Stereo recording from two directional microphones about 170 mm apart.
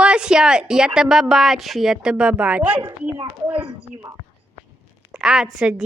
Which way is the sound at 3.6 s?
20° right (ahead or behind).